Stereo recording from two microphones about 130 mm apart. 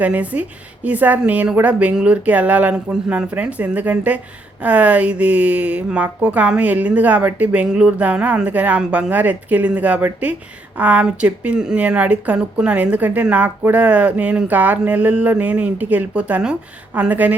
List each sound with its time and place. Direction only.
0.0 s speech: 10° right (ahead or behind)